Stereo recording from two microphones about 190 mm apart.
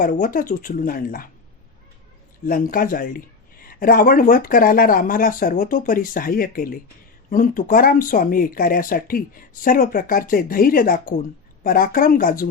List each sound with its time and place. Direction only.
0.0 s speech: 45° left (ahead or behind)
2.5 s speech: 45° left (ahead or behind)